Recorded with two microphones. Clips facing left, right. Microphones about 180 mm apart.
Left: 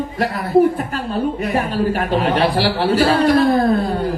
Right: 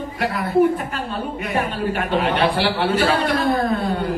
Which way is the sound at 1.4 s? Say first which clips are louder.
Left 4 dB; 35° left (ahead or behind).